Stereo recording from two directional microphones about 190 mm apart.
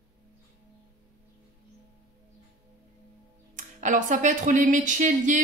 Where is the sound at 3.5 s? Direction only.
40° right (ahead or behind).